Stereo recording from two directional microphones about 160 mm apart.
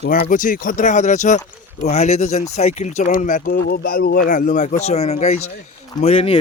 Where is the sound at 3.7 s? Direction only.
70° left (ahead or behind); by 6.3 s 40° left (ahead or behind).